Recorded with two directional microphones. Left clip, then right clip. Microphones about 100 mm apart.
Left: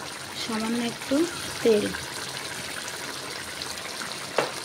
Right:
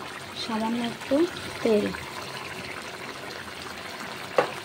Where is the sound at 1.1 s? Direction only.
5° right (ahead or behind).